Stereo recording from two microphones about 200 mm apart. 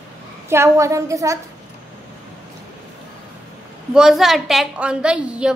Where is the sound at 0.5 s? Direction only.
15° right (ahead or behind).